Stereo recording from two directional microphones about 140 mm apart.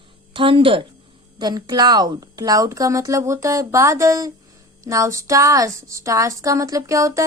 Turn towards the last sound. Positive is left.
turn(degrees=-20)  # may be behind; listen again after turning